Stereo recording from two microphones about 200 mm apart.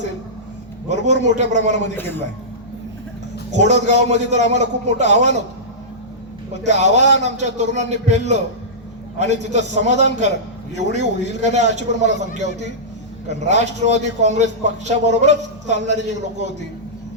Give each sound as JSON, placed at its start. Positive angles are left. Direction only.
{"t": 0.9, "sound": "a man's voice", "side_deg": -35}
{"t": 2.0, "sound": "a man's voice", "side_deg": 10}
{"t": 3.5, "sound": "a man's voice", "side_deg": -35}
{"t": 6.5, "sound": "a man's voice", "side_deg": -35}